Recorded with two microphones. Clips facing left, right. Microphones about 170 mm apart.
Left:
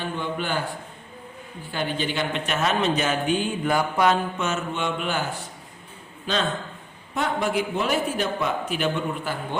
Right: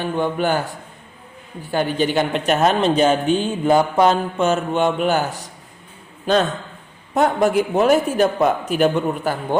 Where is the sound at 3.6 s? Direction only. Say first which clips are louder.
Right 8 dB; 30° right (ahead or behind).